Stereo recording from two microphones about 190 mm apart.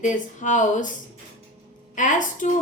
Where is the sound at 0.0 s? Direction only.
40° left (ahead or behind).